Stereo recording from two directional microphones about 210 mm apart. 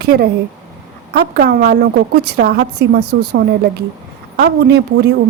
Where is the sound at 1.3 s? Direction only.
45° right (ahead or behind).